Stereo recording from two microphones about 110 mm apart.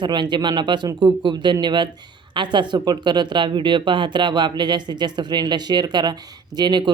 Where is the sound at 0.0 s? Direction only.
45° right (ahead or behind).